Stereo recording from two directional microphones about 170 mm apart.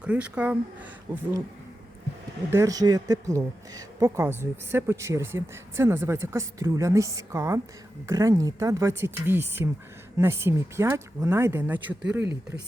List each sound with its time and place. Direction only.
0.0 s speech: 5° right (ahead or behind)
2.5 s speech: 20° right (ahead or behind)